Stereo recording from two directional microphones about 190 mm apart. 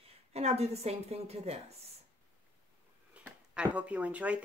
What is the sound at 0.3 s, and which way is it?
A woman's voice, 35° right (ahead or behind).